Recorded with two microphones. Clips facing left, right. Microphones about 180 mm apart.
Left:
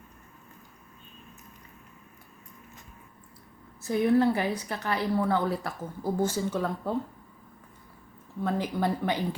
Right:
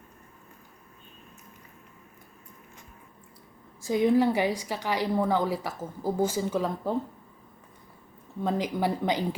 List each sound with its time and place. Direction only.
3.8 s a woman's voice: 15° right (ahead or behind)
8.4 s a woman's voice: 15° right (ahead or behind)